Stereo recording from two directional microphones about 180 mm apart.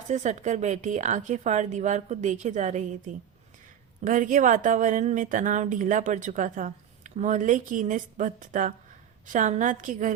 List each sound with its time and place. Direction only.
0.1 s a woman's voice: 40° right (ahead or behind)